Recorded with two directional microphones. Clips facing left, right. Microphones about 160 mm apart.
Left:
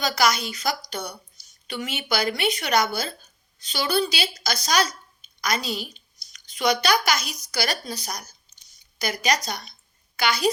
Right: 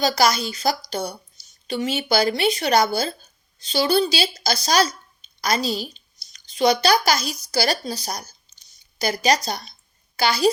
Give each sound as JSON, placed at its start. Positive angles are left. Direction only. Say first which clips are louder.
{"t": 0.0, "sound": "speech", "louder": "right 3 dB", "side_deg": -30}